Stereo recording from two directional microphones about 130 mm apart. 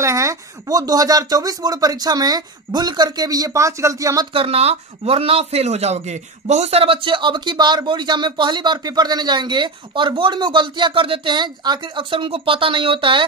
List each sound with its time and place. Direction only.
0.0 s speech: 25° right (ahead or behind)
4.3 s speech: 50° right (ahead or behind)